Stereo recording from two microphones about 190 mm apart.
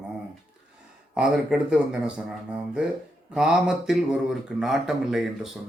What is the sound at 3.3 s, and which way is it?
Speech, 5° right (ahead or behind).